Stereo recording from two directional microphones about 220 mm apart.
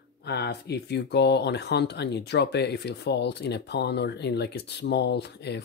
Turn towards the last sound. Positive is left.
turn(degrees=50)  # may be behind; listen again after turning